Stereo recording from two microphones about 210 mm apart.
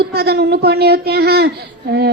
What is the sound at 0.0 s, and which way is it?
A child's voice, 50° right (ahead or behind).